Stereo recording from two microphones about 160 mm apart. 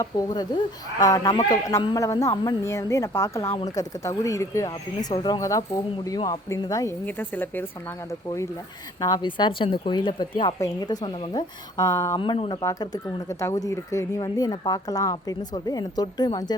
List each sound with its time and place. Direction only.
0.0 s speech: 25° left (ahead or behind)
7.0 s speech: 10° left (ahead or behind)
12.2 s speech: 30° left (ahead or behind)